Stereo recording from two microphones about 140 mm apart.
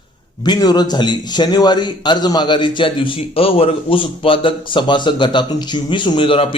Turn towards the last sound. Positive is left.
turn(degrees=40)  # may be behind; listen again after turning